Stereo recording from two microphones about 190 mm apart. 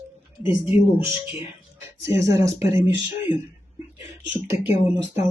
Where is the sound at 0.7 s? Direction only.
10° right (ahead or behind).